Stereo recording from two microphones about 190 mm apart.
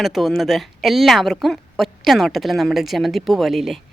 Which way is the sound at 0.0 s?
Centre (ahead or behind).